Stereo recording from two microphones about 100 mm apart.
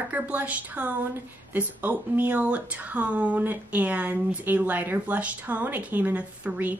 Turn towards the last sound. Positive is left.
turn(degrees=-15)  # may be behind; listen again after turning